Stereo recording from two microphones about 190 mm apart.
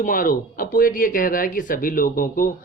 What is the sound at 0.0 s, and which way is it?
Speech, 45° left (ahead or behind).